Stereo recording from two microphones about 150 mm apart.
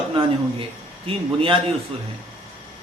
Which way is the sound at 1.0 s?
35° right (ahead or behind).